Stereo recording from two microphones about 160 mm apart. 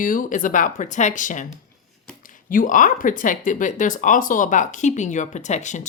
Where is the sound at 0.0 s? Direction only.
55° left (ahead or behind).